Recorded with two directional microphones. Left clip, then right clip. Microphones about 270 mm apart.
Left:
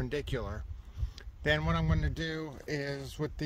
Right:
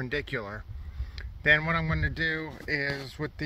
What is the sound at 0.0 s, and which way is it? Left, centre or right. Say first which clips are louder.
Speech: right 4 dB; centre.